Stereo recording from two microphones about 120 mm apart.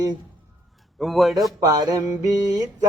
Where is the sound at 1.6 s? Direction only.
30° right (ahead or behind).